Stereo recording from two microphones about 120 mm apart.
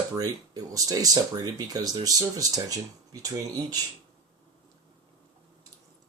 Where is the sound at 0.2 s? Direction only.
30° right (ahead or behind).